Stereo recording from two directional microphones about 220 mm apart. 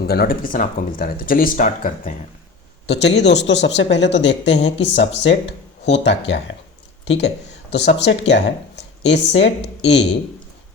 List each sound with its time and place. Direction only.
0.0 s speech: 45° left (ahead or behind)
2.8 s speech: 50° left (ahead or behind)
7.7 s speech: 50° left (ahead or behind)